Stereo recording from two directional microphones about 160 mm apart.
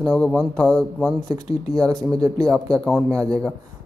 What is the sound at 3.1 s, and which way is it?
Speech, 20° right (ahead or behind).